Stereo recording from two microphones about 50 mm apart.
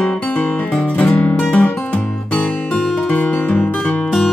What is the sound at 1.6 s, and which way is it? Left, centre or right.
Music, left.